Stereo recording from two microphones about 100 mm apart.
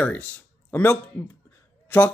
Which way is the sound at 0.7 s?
15° left (ahead or behind).